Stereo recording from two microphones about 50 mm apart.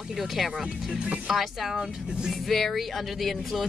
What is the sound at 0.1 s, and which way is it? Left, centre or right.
Speech, centre.